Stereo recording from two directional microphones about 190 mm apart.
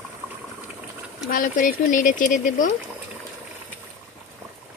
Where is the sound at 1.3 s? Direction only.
45° left (ahead or behind).